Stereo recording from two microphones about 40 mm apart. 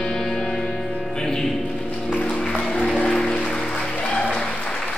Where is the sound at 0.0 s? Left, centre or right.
Centre.